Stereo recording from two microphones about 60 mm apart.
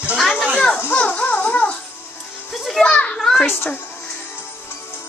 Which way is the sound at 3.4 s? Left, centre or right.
Left.